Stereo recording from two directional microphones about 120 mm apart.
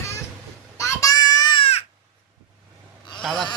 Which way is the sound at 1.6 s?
60° left (ahead or behind).